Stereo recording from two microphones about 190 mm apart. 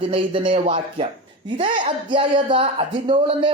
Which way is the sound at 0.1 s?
25° right (ahead or behind).